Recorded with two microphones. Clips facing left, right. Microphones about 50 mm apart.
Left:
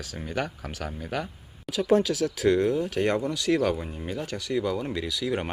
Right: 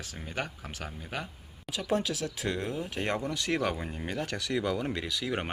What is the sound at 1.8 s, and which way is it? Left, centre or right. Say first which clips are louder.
Speech: left 8 dB; centre.